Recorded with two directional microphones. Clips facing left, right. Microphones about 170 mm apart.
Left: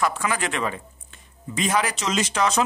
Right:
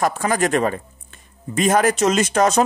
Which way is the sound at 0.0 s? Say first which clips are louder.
Right 5 dB; 45° right (ahead or behind).